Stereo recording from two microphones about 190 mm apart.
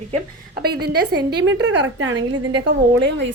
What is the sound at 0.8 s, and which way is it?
A woman's voice, 60° right (ahead or behind).